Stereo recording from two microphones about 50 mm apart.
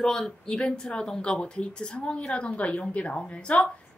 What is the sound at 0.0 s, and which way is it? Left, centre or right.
A woman's voice, centre.